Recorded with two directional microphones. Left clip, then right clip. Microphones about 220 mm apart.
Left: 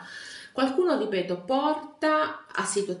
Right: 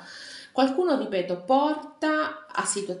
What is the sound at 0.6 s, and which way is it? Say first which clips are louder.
Speech: right 1 dB; 15° right (ahead or behind).